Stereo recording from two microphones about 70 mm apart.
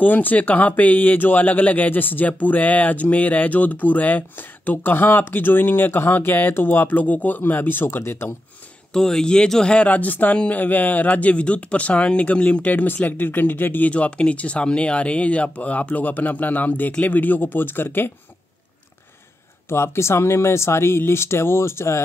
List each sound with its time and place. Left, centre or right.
0.0 s speech: left
8.9 s speech: centre; by 18.1 s left
19.7 s speech: left